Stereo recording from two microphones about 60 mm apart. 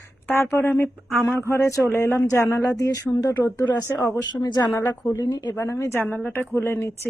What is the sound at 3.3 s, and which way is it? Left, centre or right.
Speech, left.